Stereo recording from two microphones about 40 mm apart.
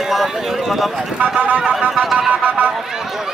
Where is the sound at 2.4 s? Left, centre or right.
Right.